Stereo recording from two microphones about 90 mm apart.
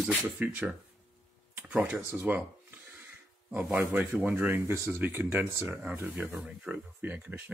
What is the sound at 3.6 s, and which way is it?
Speech, 15° right (ahead or behind).